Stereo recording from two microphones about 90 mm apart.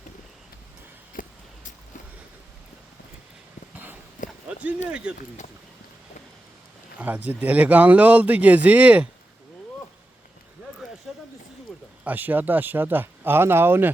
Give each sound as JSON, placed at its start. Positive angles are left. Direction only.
{"t": 4.4, "sound": "speech", "side_deg": -15}
{"t": 7.0, "sound": "speech", "side_deg": -20}
{"t": 10.8, "sound": "a sound", "side_deg": -5}
{"t": 12.0, "sound": "speech", "side_deg": -20}